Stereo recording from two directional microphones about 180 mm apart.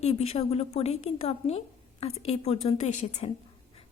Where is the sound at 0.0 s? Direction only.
35° left (ahead or behind).